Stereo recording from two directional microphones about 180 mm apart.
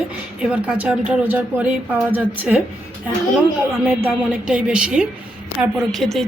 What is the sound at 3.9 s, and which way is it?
A woman's voice, 5° right (ahead or behind).